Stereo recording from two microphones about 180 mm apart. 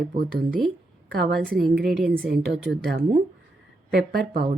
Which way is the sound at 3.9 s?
60° right (ahead or behind).